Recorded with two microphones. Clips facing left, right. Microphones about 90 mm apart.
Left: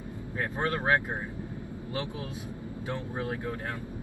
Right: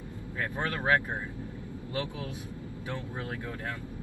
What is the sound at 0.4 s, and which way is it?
Speech, 25° left (ahead or behind).